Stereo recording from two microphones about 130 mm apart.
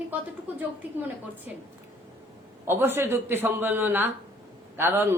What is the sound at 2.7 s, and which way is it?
A woman's voice, 15° right (ahead or behind).